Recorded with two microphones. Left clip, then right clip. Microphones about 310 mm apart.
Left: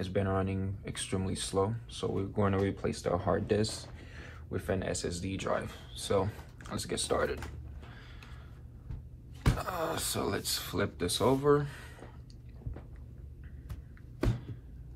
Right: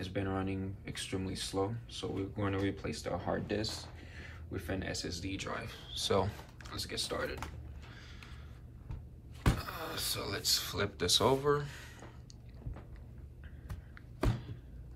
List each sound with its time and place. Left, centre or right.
0.0 s speech: centre
6.7 s speech: centre
9.6 s speech: centre